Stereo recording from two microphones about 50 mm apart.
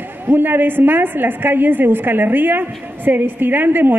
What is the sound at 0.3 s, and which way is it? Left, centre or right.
A woman's voice, right.